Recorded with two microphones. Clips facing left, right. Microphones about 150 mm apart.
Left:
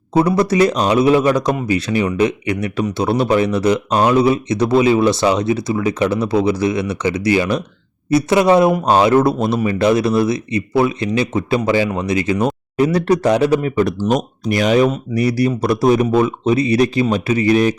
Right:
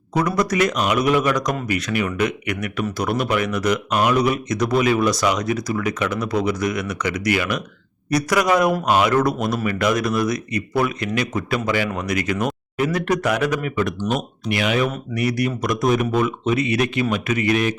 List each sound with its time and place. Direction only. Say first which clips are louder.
0.2 s a man's voice: left 6 dB; 30° left (ahead or behind)